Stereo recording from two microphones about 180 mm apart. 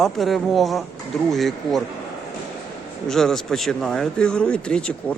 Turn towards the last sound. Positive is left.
turn(degrees=5)  # may be behind; listen again after turning